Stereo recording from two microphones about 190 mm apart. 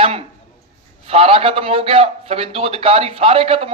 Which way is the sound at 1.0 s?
30° right (ahead or behind).